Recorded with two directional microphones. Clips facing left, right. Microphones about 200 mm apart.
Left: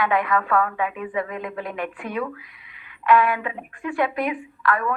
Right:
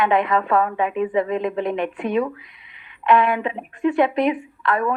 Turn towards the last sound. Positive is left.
turn(degrees=-25)  # may be behind; listen again after turning